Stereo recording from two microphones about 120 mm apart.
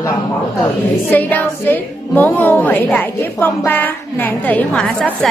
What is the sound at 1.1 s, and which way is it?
A woman's voice, 15° left (ahead or behind).